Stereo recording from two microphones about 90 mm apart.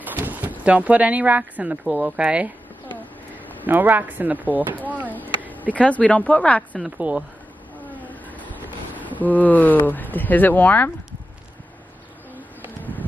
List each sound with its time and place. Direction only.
0.0 s speech: 20° right (ahead or behind)
3.6 s speech: 20° right (ahead or behind)
5.8 s speech: 15° left (ahead or behind)
7.0 s speech: 15° right (ahead or behind)
7.9 s vehicle: 20° left (ahead or behind)
8.9 s speech: 20° left (ahead or behind)